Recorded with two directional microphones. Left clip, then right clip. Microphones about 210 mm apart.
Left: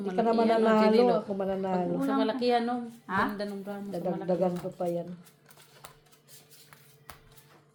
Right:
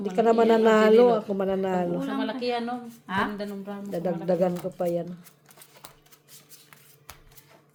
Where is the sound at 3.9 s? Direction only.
40° right (ahead or behind).